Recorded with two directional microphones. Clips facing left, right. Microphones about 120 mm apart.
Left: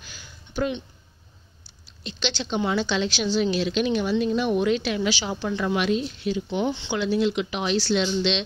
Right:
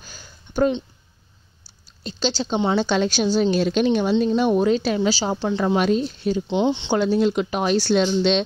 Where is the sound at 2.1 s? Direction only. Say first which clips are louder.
Right 5 dB; 35° right (ahead or behind).